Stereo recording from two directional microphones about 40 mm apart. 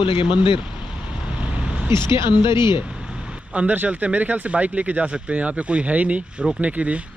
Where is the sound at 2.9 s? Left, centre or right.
Right.